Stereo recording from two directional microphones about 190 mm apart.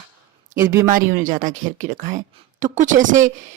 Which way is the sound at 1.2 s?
45° right (ahead or behind).